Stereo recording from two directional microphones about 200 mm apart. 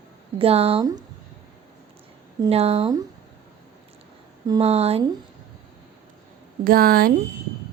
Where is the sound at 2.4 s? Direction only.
30° right (ahead or behind).